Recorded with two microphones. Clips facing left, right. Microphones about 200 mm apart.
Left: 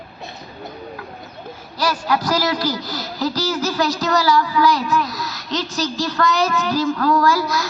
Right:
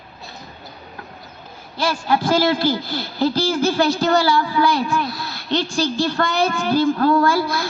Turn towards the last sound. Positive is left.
turn(degrees=-30)  # may be behind; listen again after turning